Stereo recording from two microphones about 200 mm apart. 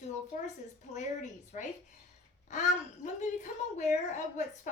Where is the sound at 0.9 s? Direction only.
35° left (ahead or behind).